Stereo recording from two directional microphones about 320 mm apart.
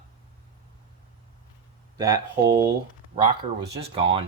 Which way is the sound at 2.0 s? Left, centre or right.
Centre.